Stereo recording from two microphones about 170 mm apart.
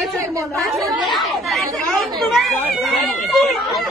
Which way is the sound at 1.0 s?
Centre (ahead or behind).